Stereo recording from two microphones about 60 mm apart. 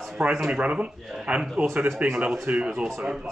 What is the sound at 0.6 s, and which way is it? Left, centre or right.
Speech, right.